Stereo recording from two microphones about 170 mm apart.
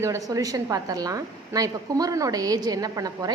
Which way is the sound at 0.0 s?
20° right (ahead or behind).